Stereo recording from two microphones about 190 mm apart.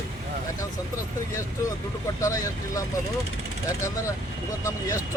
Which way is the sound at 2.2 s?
15° left (ahead or behind).